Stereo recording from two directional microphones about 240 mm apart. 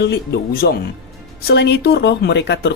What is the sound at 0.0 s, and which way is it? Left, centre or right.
Speech, left.